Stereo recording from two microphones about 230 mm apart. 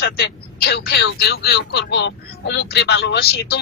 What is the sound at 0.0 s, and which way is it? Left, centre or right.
Speech, left.